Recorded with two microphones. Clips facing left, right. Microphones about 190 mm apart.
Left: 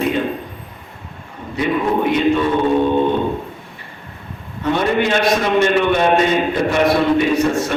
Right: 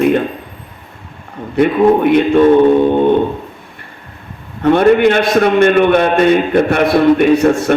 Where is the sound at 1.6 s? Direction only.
55° right (ahead or behind).